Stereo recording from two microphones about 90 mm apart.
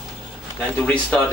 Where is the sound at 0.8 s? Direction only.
15° left (ahead or behind).